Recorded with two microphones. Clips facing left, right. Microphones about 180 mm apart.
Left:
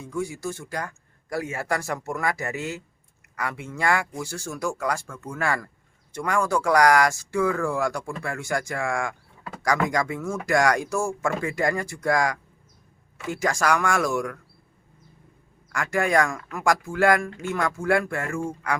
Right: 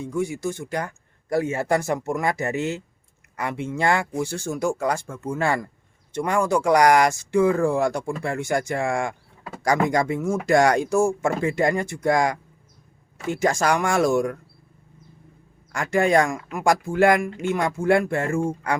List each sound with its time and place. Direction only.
0.0 s speech: 20° right (ahead or behind)
15.7 s speech: 25° right (ahead or behind)